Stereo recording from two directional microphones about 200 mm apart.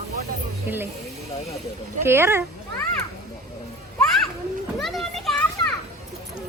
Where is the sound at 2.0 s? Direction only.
10° right (ahead or behind).